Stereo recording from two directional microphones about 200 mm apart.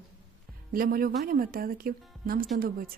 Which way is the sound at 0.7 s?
45° right (ahead or behind).